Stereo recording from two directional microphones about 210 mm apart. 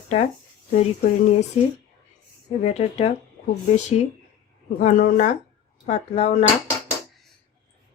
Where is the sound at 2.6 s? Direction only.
30° left (ahead or behind).